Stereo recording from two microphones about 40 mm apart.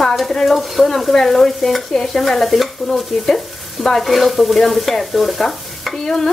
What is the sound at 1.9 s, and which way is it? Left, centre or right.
Stir, centre.